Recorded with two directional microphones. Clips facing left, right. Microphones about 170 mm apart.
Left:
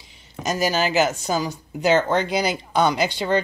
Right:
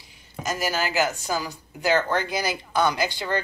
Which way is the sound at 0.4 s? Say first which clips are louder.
Left 5 dB; 20° left (ahead or behind).